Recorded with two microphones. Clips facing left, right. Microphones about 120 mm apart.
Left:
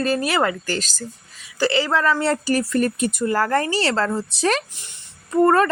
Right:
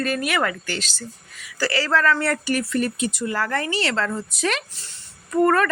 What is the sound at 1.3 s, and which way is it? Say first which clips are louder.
Speech: left 4 dB; 25° left (ahead or behind).